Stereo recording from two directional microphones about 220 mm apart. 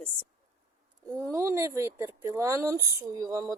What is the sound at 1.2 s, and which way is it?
Speech, 15° right (ahead or behind).